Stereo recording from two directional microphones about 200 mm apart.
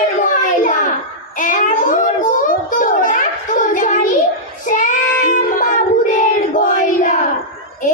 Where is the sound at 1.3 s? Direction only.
40° left (ahead or behind).